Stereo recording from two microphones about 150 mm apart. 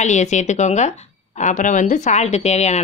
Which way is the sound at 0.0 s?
50° left (ahead or behind).